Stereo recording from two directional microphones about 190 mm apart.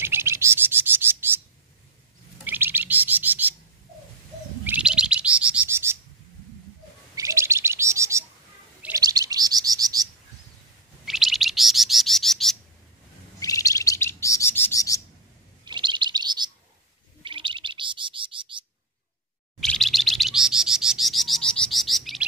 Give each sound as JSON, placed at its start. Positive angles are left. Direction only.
{"t": 0.0, "sound": "bird", "side_deg": -15}
{"t": 2.4, "sound": "bird", "side_deg": -10}
{"t": 4.6, "sound": "bird", "side_deg": -5}
{"t": 7.2, "sound": "chirp", "side_deg": -15}
{"t": 11.1, "sound": "chirp", "side_deg": 0}
{"t": 13.4, "sound": "chirp", "side_deg": 15}
{"t": 15.6, "sound": "chirp", "side_deg": -25}
{"t": 17.2, "sound": "bird", "side_deg": -25}
{"t": 19.6, "sound": "bird", "side_deg": 0}